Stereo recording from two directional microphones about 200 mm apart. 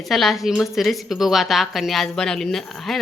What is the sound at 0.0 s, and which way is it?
A woman's voice, centre (ahead or behind).